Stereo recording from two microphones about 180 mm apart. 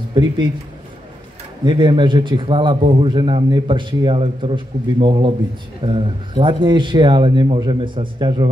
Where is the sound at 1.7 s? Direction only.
25° right (ahead or behind).